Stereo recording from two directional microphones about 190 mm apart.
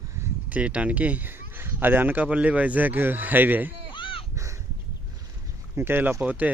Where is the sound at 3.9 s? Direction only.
25° left (ahead or behind).